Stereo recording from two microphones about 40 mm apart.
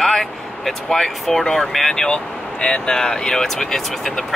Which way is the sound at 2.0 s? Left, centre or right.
Left.